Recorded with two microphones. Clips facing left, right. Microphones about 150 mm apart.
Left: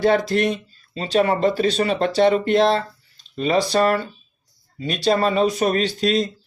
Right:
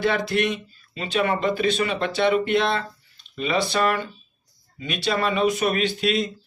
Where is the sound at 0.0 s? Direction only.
40° left (ahead or behind).